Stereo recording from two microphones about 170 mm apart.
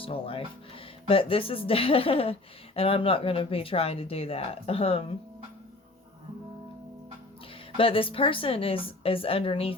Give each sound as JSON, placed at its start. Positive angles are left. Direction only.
{"t": 0.0, "sound": "speech", "side_deg": 30}
{"t": 7.8, "sound": "speech", "side_deg": 30}